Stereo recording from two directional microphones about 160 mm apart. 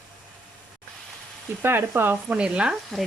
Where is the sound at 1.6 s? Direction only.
15° right (ahead or behind).